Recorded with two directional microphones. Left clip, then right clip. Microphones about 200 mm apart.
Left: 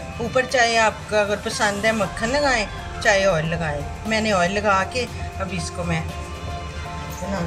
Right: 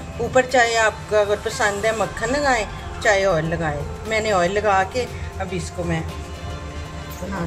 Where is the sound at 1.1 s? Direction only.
30° right (ahead or behind).